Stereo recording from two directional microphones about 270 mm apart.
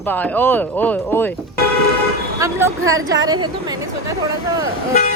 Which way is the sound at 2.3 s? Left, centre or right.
Centre.